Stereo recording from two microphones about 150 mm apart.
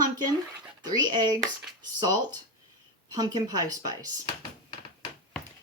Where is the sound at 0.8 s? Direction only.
25° right (ahead or behind).